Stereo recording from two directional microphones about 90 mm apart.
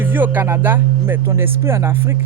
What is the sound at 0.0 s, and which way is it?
Speech, 20° right (ahead or behind).